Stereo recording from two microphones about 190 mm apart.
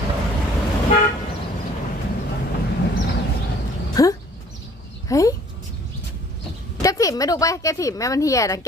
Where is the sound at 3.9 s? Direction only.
20° left (ahead or behind).